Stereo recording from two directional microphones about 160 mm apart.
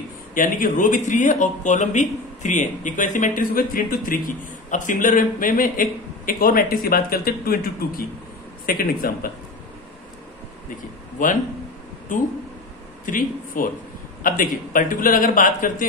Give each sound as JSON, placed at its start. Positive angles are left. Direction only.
{"t": 0.3, "sound": "speech", "side_deg": 60}
{"t": 11.2, "sound": "speech", "side_deg": 55}